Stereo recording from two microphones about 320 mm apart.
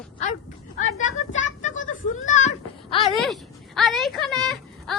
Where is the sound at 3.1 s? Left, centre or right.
Centre.